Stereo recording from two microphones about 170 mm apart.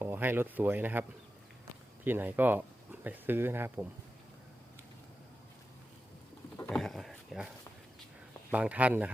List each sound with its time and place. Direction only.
0.0 s speech: 10° right (ahead or behind)
2.0 s speech: 10° right (ahead or behind)
6.7 s dog: 5° left (ahead or behind)
8.5 s speech: 10° right (ahead or behind)